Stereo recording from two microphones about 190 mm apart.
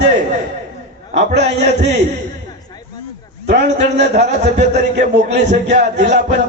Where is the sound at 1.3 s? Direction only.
65° right (ahead or behind).